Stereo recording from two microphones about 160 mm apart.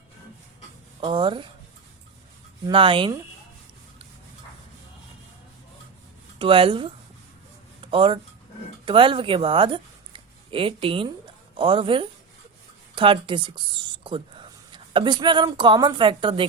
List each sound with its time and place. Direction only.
1.0 s speech: 30° right (ahead or behind)
2.6 s speech: 30° right (ahead or behind)
6.4 s speech: 35° right (ahead or behind)
7.8 s a sound: 35° right (ahead or behind)
8.8 s a woman's voice: 30° right (ahead or behind)